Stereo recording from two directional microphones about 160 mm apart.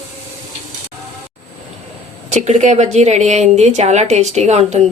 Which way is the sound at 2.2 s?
45° right (ahead or behind).